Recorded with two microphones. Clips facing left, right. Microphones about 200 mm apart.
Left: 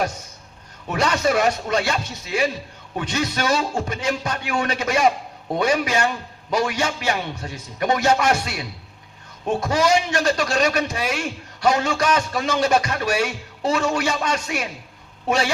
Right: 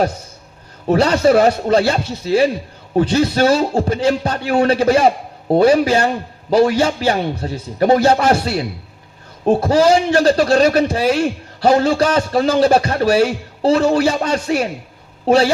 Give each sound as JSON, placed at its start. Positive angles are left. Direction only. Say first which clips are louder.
{"t": 0.9, "sound": "a man's voice", "louder": "right 8 dB", "side_deg": -35}